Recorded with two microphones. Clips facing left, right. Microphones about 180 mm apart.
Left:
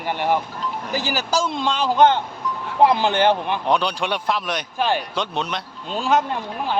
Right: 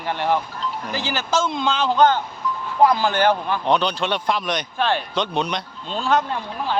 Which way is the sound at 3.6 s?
10° left (ahead or behind).